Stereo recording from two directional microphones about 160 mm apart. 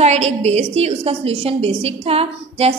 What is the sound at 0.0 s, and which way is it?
A woman's voice, 45° right (ahead or behind).